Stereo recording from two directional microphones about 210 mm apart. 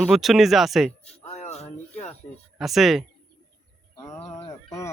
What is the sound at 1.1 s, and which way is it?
Music, 30° left (ahead or behind).